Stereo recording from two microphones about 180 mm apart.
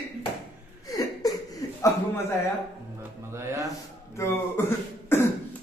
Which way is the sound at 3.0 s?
15° right (ahead or behind).